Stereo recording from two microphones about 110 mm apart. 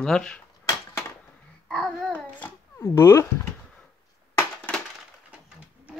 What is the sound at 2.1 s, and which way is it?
Babbling, 15° left (ahead or behind).